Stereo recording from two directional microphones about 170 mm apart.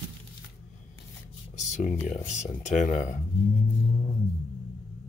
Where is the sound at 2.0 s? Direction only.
45° left (ahead or behind).